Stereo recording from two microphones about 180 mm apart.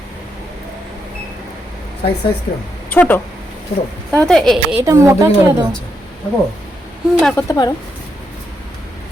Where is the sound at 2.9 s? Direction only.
10° left (ahead or behind).